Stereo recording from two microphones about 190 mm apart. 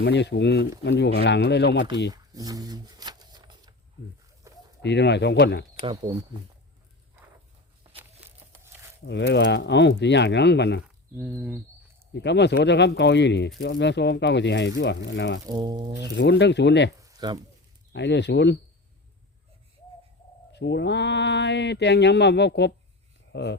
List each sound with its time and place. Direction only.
0.0 s speech: 65° left (ahead or behind)
2.1 s a sound: 20° right (ahead or behind)
4.4 s chicken: 15° right (ahead or behind)
4.8 s speech: 65° left (ahead or behind)
5.8 s speech: 25° right (ahead or behind)
9.0 s speech: 65° left (ahead or behind)
11.2 s speech: 10° right (ahead or behind)
12.1 s speech: 65° left (ahead or behind)
15.4 s speech: 20° right (ahead or behind)
16.1 s speech: 65° left (ahead or behind)
17.0 s a sound: 20° right (ahead or behind)
17.9 s speech: 65° left (ahead or behind)
20.5 s speech: 65° left (ahead or behind)